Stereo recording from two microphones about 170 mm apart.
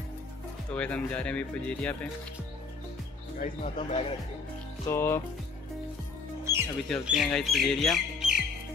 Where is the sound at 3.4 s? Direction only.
45° left (ahead or behind).